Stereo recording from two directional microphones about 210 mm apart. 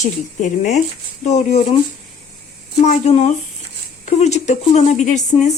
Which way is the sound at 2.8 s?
30° left (ahead or behind).